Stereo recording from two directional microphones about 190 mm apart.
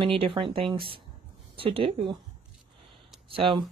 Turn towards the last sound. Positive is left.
turn(degrees=-30)  # may be behind; listen again after turning